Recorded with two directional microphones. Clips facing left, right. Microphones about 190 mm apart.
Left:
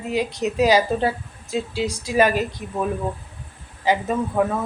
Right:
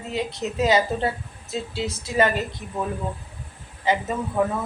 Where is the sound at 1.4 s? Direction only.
15° left (ahead or behind).